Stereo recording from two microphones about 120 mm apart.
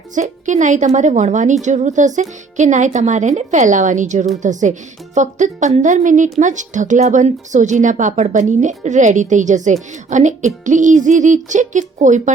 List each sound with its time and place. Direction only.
0.1 s a woman's voice: 85° right